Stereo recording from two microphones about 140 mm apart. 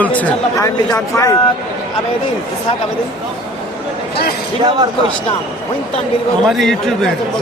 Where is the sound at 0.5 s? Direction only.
25° left (ahead or behind).